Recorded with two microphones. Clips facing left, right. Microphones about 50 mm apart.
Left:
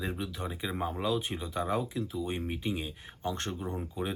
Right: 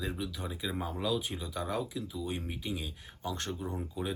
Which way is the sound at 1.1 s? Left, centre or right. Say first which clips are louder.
Left 2 dB; centre.